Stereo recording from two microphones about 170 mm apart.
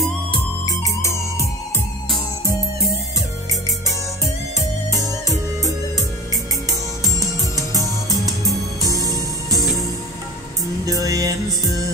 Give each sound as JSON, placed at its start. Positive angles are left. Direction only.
{"t": 0.3, "sound": "music", "side_deg": 20}
{"t": 5.2, "sound": "music", "side_deg": -20}
{"t": 8.8, "sound": "music", "side_deg": -20}
{"t": 11.1, "sound": "music", "side_deg": -20}